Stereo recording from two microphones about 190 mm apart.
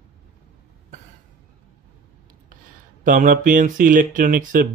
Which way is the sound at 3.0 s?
45° right (ahead or behind).